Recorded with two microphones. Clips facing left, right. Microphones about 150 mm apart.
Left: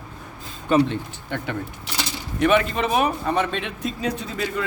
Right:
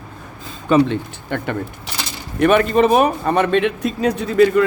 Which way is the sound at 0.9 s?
55° right (ahead or behind).